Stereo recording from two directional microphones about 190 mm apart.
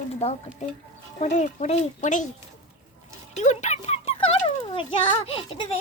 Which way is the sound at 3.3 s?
40° left (ahead or behind).